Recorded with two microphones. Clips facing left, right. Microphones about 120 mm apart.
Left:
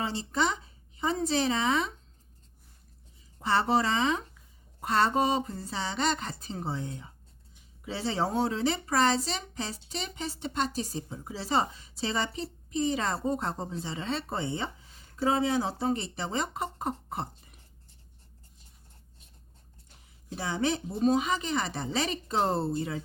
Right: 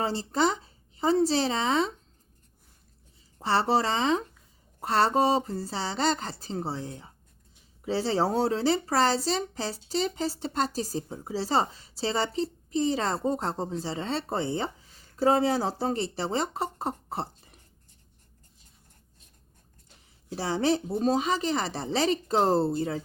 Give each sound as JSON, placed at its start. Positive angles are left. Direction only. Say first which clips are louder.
{"t": 0.0, "sound": "a woman's voice", "louder": "right 4 dB", "side_deg": -35}
{"t": 3.4, "sound": "speech", "louder": "right 1 dB", "side_deg": -30}
{"t": 20.3, "sound": "speech", "louder": "right 4 dB", "side_deg": -35}